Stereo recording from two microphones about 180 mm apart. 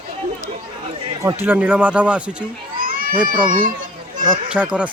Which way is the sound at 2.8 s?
50° right (ahead or behind).